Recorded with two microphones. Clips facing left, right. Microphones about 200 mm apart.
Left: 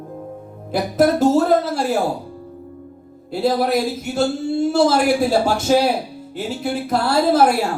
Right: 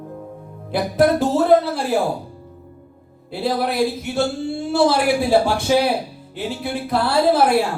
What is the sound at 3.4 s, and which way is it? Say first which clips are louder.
Speech: left 2 dB; 45° left (ahead or behind).